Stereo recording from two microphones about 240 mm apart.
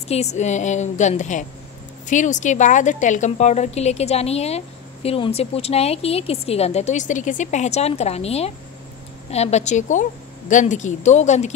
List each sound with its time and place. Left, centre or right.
0.1 s speech: left